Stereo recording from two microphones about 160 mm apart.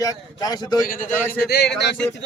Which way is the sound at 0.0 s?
20° left (ahead or behind).